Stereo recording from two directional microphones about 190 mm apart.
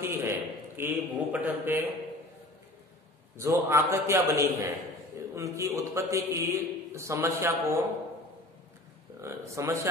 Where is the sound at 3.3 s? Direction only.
15° right (ahead or behind).